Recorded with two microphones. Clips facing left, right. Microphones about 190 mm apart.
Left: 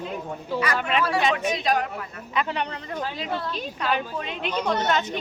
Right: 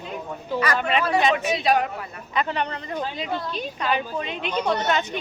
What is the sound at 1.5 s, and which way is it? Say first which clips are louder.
Speech: right 3 dB; 5° right (ahead or behind).